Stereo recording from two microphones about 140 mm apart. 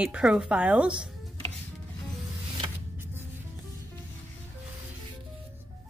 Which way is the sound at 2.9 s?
15° right (ahead or behind).